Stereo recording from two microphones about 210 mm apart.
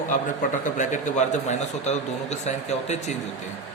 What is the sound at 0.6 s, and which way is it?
A man's voice, 35° left (ahead or behind).